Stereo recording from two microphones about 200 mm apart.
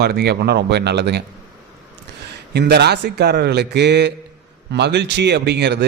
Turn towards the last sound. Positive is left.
turn(degrees=-55)  # may be behind; listen again after turning